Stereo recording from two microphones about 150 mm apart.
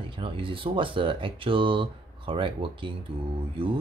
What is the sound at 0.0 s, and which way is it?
Speech, 35° right (ahead or behind).